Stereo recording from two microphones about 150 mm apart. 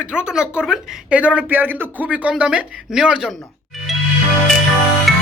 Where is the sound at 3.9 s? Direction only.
Centre (ahead or behind).